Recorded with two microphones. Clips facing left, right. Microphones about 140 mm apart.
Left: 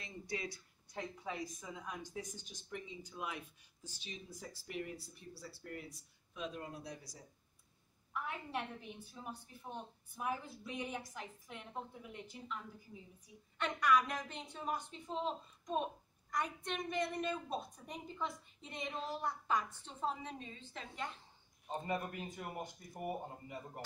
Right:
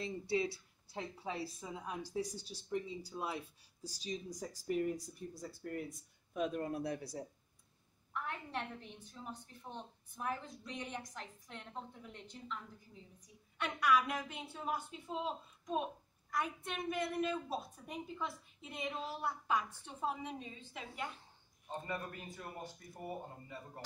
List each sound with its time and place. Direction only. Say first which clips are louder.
0.0 s a woman's voice: right 8 dB; 30° right (ahead or behind)
5.9 s speech: right 9 dB; 50° right (ahead or behind)
8.1 s a woman's voice: even; 5° left (ahead or behind)
13.6 s a woman's voice: even; 10° right (ahead or behind)
21.6 s a woman's voice: left 3 dB; 20° left (ahead or behind)